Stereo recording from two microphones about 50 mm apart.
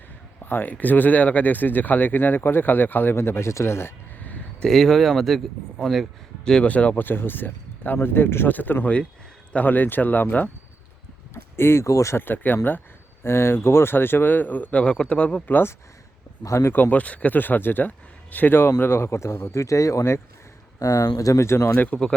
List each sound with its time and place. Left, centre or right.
0.4 s speech: left
4.6 s speech: centre
6.4 s speech: centre
6.7 s speech: left
8.5 s speech: left
11.5 s speech: left
12.1 s speech: left
13.2 s speech: left
16.4 s speech: left
16.7 s speech: left
18.5 s speech: left
19.5 s speech: left
21.3 s speech: left